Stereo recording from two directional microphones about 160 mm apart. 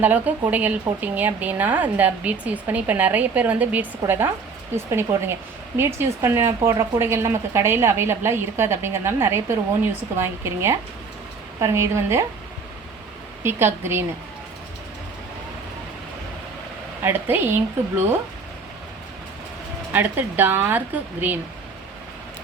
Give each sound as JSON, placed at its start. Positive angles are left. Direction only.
{"t": 0.0, "sound": "speech", "side_deg": -10}
{"t": 13.4, "sound": "speech", "side_deg": -15}
{"t": 17.0, "sound": "speech", "side_deg": -15}
{"t": 19.9, "sound": "speech", "side_deg": -10}